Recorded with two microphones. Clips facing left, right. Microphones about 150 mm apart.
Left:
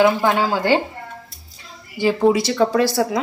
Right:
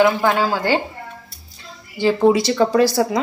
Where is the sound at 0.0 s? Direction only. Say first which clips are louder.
Even; 15° left (ahead or behind).